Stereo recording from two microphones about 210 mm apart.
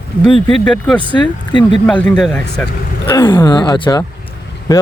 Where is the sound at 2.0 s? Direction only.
5° left (ahead or behind).